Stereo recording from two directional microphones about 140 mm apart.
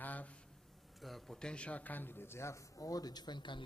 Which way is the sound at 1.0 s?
Centre (ahead or behind).